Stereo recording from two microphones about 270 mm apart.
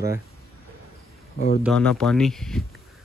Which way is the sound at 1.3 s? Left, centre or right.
Left.